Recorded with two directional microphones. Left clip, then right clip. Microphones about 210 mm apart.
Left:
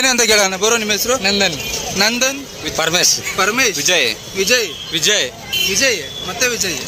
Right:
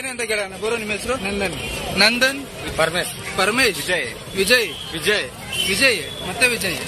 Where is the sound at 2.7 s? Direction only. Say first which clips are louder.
Left 5 dB; 40° left (ahead or behind).